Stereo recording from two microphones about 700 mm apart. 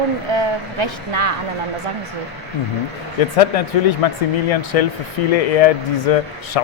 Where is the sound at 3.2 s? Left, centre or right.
Left.